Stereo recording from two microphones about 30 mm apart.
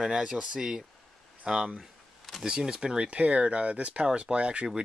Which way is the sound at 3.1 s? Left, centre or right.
Right.